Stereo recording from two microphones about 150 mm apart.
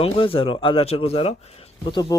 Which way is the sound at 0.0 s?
40° left (ahead or behind).